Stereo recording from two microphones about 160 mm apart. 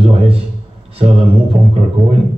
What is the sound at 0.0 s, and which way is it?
A man's voice, 35° right (ahead or behind).